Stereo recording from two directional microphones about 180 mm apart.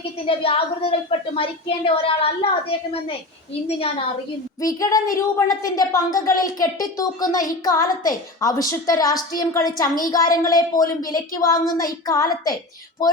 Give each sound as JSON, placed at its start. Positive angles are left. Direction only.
{"t": 0.3, "sound": "speech", "side_deg": 30}
{"t": 4.6, "sound": "a woman's voice", "side_deg": 20}